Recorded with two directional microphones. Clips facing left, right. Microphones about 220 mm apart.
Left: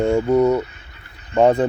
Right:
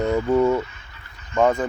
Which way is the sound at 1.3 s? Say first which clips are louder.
Left 4 dB; 35° left (ahead or behind).